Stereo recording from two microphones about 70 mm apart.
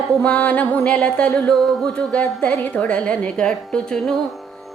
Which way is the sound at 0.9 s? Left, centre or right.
Centre.